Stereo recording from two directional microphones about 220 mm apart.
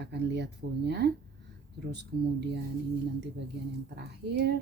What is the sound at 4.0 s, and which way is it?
Speech, 50° right (ahead or behind).